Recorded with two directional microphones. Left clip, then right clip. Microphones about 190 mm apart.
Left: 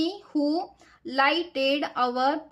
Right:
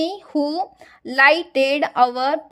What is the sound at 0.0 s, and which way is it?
A woman's voice, 35° right (ahead or behind).